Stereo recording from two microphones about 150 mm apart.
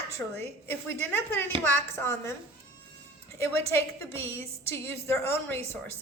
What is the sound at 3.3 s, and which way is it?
A woman's voice, 20° left (ahead or behind).